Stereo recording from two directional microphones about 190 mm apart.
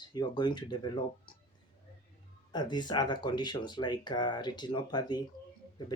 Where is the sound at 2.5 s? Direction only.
25° left (ahead or behind).